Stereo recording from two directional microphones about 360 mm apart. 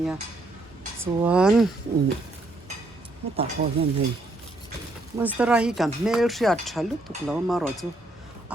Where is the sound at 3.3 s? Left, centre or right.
Centre.